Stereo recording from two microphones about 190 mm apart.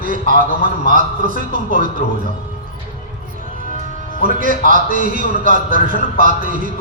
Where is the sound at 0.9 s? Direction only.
45° right (ahead or behind).